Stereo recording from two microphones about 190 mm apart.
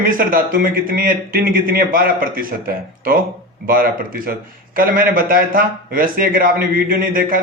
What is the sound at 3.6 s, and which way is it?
Speech, 50° right (ahead or behind).